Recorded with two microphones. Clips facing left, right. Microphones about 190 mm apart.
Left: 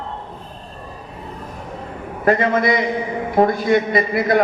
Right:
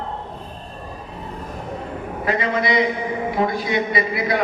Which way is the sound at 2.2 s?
50° left (ahead or behind).